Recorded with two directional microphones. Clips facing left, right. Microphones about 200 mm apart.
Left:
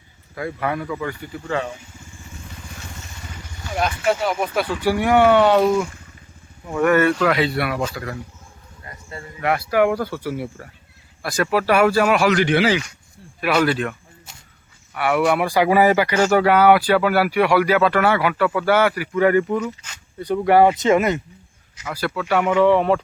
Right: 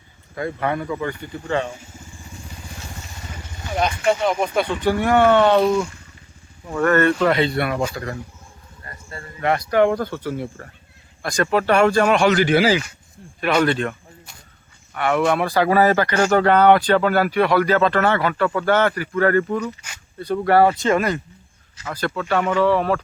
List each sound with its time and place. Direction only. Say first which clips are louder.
0.3 s speech: right 1 dB; 5° left (ahead or behind)
3.8 s speech: right 1 dB; centre (ahead or behind)
8.8 s a sound: left 1 dB; 20° left (ahead or behind)
9.4 s speech: right 1 dB; 5° left (ahead or behind)
12.5 s speech: right 1 dB; 40° right (ahead or behind)
13.7 s speech: even; 5° left (ahead or behind)
14.9 s speech: even; 10° left (ahead or behind)